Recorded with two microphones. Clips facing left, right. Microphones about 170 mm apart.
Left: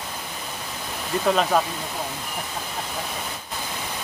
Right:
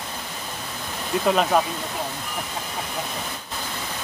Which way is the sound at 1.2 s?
5° right (ahead or behind).